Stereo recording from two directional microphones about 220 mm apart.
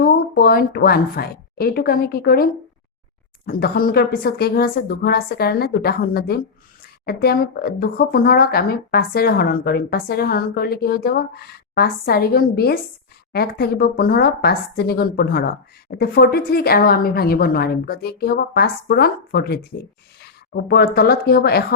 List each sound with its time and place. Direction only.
0.0 s a woman's voice: 45° left (ahead or behind)